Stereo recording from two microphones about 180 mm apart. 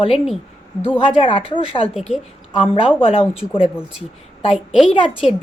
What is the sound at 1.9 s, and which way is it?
Speech, centre (ahead or behind).